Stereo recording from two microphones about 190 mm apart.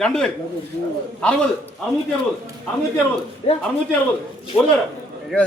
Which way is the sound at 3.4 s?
30° left (ahead or behind).